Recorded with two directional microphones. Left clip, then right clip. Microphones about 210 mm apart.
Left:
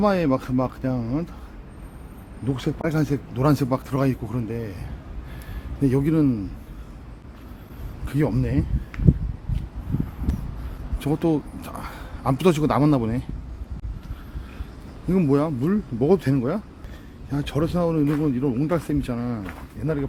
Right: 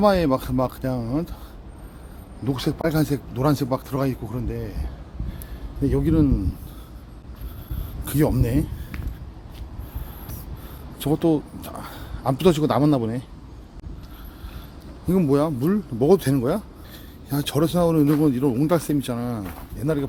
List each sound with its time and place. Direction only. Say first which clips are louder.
0.0 s speech: right 2 dB; 5° right (ahead or behind)
2.5 s speech: right 2 dB; 15° right (ahead or behind)
8.0 s speech: right 2 dB; 15° right (ahead or behind)
11.0 s speech: right 2 dB; 5° right (ahead or behind)
15.1 s speech: right 1 dB; 10° right (ahead or behind)